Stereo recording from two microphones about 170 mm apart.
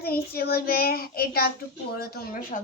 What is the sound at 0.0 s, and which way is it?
A child's voice, 65° left (ahead or behind).